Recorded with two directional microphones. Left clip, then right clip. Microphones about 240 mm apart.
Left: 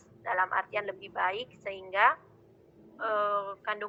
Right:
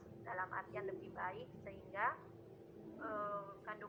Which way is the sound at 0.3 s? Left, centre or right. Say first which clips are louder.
Left 15 dB; left.